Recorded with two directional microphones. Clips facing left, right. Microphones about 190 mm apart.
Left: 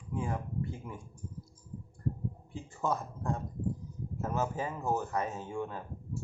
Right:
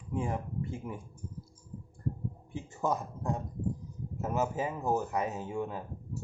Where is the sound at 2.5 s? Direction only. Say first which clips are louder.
Right 2 dB; 20° right (ahead or behind).